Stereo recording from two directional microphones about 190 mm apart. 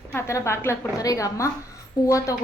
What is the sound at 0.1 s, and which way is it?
A woman's voice, 15° left (ahead or behind).